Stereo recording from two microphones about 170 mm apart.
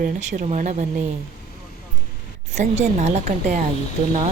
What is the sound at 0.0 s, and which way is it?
Speech, 45° right (ahead or behind).